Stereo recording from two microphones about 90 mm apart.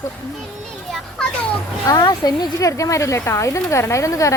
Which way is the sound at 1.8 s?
45° left (ahead or behind).